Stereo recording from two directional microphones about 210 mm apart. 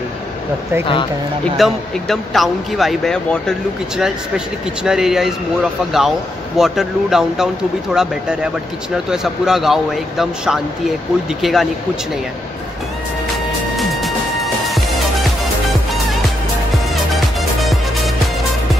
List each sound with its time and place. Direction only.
1.4 s speech: centre (ahead or behind)
13.7 s music: centre (ahead or behind)
16.7 s music: centre (ahead or behind)